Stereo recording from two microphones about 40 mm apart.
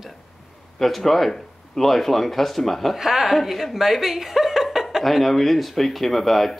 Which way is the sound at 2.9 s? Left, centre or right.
Centre.